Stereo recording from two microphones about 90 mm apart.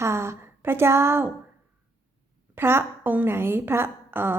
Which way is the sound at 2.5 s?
25° right (ahead or behind).